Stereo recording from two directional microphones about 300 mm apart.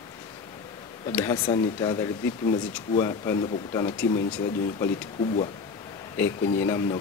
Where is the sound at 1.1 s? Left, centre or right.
Centre.